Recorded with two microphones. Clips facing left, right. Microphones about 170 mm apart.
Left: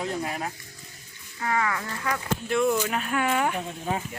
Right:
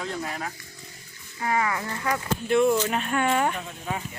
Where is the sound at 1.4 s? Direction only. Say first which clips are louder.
Right 1 dB; 20° right (ahead or behind).